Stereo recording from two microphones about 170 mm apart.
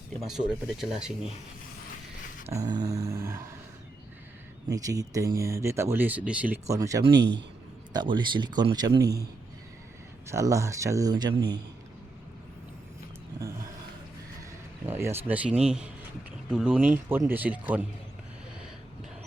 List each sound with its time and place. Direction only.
0.3 s speech: 5° right (ahead or behind)
2.5 s a man's voice: 20° right (ahead or behind)
4.7 s speech: 20° right (ahead or behind)
6.7 s a man's voice: 20° right (ahead or behind)
7.1 s a man's voice: 90° right
7.9 s a man's voice: 30° right (ahead or behind)
10.2 s a man's voice: 15° right (ahead or behind)
14.8 s speech: 15° right (ahead or behind)